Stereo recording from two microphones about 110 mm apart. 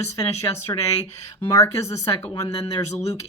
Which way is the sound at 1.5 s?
30° left (ahead or behind).